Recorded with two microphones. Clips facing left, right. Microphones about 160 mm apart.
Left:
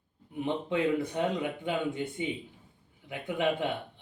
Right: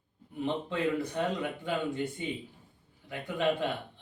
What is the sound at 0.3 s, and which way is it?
Speech, 15° left (ahead or behind).